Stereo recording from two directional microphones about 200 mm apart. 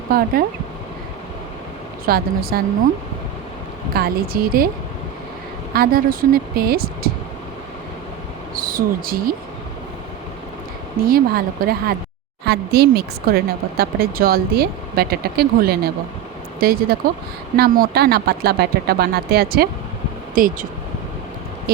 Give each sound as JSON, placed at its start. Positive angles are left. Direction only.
{"t": 2.0, "sound": "speech", "side_deg": -50}
{"t": 3.9, "sound": "speech", "side_deg": -50}
{"t": 5.7, "sound": "speech", "side_deg": -45}
{"t": 8.5, "sound": "speech", "side_deg": -45}
{"t": 11.0, "sound": "speech", "side_deg": -45}